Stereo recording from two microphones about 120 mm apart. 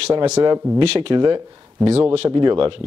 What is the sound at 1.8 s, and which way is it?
Speech, 10° right (ahead or behind).